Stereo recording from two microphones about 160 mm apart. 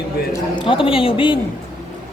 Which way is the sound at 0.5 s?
35° left (ahead or behind).